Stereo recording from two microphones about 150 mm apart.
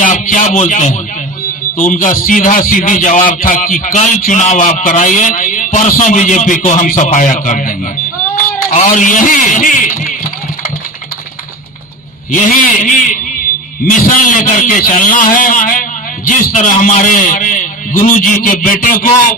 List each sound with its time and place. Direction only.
0.0 s a man's voice: 60° left (ahead or behind)
12.3 s a man's voice: 60° left (ahead or behind)